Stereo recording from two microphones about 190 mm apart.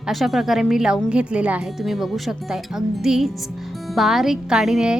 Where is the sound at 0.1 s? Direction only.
Centre (ahead or behind).